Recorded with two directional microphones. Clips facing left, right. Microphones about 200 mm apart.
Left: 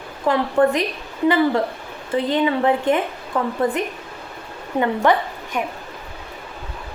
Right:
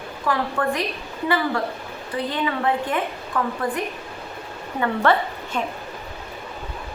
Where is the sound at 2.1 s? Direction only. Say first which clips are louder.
Left 6 dB; 20° left (ahead or behind).